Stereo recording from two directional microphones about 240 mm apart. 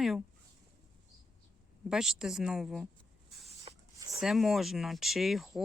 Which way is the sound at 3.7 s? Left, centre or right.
Right.